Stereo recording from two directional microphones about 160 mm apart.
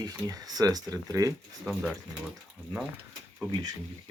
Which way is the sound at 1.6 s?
5° right (ahead or behind).